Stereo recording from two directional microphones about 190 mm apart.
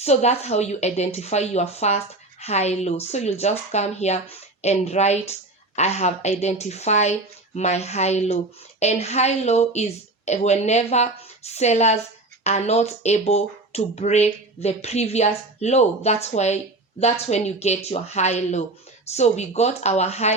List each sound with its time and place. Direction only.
0.0 s speech: 35° left (ahead or behind)